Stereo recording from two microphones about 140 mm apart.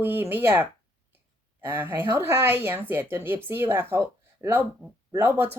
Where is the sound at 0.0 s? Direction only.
15° right (ahead or behind).